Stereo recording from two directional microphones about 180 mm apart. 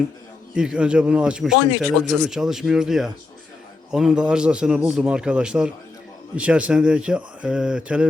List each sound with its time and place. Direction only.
0.5 s a man's voice: 5° right (ahead or behind)